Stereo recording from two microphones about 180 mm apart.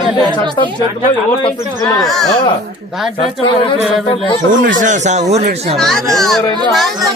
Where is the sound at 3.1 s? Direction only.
30° left (ahead or behind).